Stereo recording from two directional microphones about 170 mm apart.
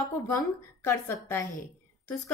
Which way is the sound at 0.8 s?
15° left (ahead or behind).